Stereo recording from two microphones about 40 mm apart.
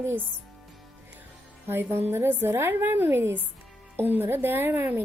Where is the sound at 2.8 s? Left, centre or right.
Right.